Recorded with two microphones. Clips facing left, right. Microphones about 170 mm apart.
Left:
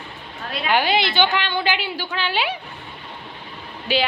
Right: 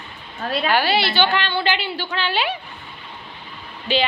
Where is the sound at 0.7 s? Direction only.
15° left (ahead or behind).